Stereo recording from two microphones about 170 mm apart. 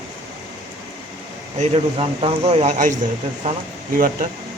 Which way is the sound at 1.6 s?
35° right (ahead or behind).